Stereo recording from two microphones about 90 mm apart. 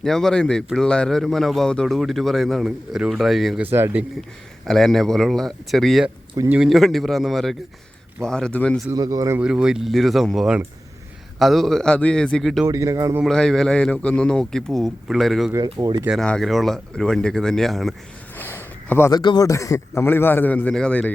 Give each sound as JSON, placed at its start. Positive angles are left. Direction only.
{"t": 0.0, "sound": "speech", "side_deg": 5}
{"t": 3.6, "sound": "speech", "side_deg": -25}
{"t": 4.6, "sound": "speech", "side_deg": 0}
{"t": 9.0, "sound": "speech", "side_deg": -40}
{"t": 9.4, "sound": "speech", "side_deg": -10}
{"t": 12.6, "sound": "a man's voice", "side_deg": -40}
{"t": 13.2, "sound": "speech", "side_deg": 5}
{"t": 15.8, "sound": "a man's voice", "side_deg": -35}
{"t": 16.2, "sound": "speech", "side_deg": 5}
{"t": 18.3, "sound": "a sound", "side_deg": 25}
{"t": 19.1, "sound": "speech", "side_deg": 50}
{"t": 19.5, "sound": "a man's voice", "side_deg": 35}